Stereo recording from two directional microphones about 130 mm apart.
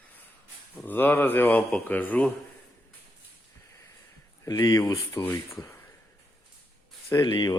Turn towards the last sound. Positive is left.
turn(degrees=35)  # may be behind; listen again after turning